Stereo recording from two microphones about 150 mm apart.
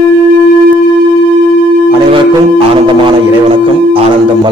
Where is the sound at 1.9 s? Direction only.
35° right (ahead or behind).